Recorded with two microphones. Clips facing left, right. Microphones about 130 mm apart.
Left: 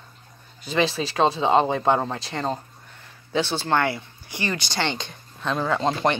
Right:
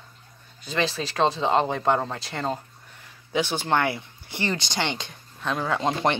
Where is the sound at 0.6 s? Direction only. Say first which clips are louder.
Left 4 dB; 5° left (ahead or behind).